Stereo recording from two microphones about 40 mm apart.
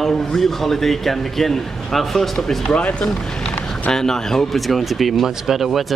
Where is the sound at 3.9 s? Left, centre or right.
Centre.